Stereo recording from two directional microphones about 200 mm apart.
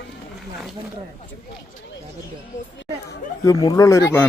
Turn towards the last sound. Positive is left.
turn(degrees=15)  # may be behind; listen again after turning